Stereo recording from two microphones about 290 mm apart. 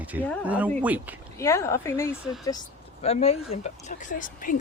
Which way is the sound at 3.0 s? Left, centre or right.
Left.